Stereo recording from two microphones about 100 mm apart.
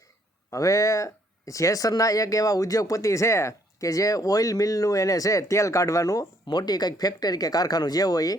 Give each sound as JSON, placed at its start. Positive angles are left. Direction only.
{"t": 0.5, "sound": "speech", "side_deg": 30}